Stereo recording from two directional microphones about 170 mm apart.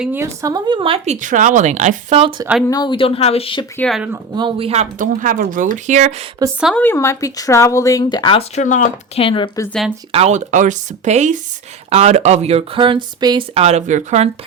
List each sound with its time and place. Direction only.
0.0 s speech: 15° right (ahead or behind); by 2.3 s 35° right (ahead or behind)
2.6 s speech: 25° left (ahead or behind)
3.8 s speech: 5° left (ahead or behind)
4.4 s speech: 30° right (ahead or behind)
6.7 s speech: 15° left (ahead or behind); by 8.4 s 30° left (ahead or behind)
8.5 s speech: 45° left (ahead or behind)
9.2 s speech: 30° left (ahead or behind)
10.1 s speech: 40° right (ahead or behind)